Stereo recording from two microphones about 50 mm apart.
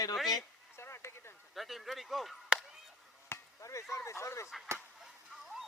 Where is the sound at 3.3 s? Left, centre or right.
Left.